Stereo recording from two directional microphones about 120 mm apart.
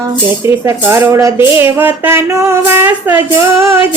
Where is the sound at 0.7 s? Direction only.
20° right (ahead or behind).